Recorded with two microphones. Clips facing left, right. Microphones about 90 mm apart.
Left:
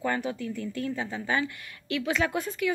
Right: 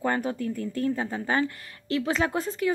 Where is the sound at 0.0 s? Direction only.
40° right (ahead or behind).